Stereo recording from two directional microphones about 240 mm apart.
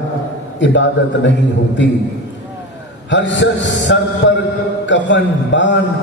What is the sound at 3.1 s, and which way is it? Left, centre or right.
A man's voice, left.